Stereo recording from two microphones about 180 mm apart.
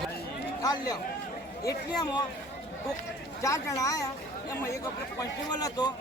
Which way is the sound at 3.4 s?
15° left (ahead or behind).